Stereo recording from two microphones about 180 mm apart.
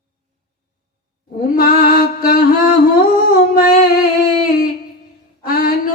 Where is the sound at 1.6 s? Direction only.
55° left (ahead or behind).